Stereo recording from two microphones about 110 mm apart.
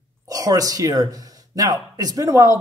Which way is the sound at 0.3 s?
35° right (ahead or behind).